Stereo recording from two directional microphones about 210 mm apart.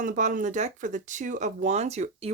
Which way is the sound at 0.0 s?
40° right (ahead or behind).